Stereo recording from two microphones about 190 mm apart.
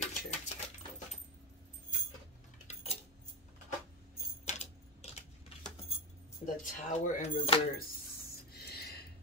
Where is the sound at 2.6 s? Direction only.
35° left (ahead or behind).